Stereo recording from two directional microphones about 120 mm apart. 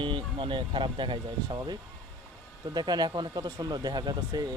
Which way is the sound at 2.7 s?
35° right (ahead or behind).